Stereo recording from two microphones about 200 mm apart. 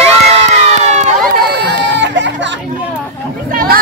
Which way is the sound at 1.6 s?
60° right (ahead or behind).